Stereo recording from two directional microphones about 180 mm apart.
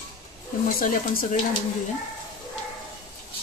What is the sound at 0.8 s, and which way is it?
Speech, 45° left (ahead or behind).